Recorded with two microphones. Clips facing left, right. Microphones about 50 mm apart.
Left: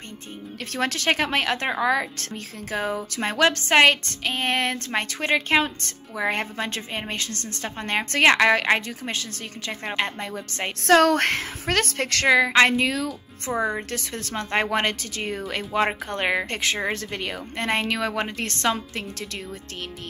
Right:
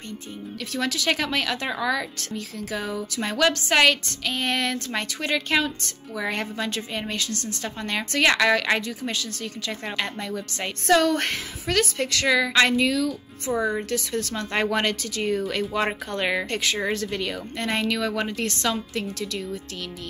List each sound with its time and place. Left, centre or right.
0.7 s a woman's voice: left
10.9 s a woman's voice: left
12.3 s a woman's voice: left
13.5 s a woman's voice: left
13.8 s a woman's voice: left